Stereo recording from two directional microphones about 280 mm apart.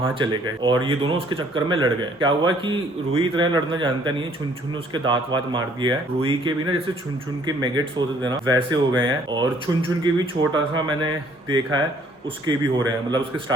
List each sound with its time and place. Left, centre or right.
0.0 s speech: centre